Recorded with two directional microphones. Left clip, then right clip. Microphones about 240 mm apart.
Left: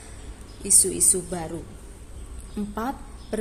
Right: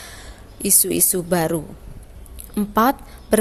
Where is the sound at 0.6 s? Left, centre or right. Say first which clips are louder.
Right 3 dB; right.